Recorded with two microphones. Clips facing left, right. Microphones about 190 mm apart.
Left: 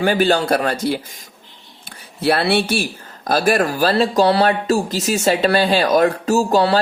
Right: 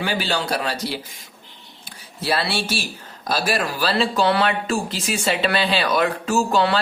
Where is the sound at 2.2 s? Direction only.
60° left (ahead or behind).